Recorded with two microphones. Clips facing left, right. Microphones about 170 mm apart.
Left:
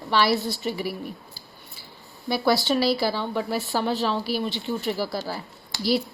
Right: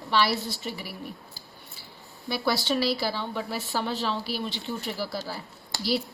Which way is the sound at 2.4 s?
50° left (ahead or behind).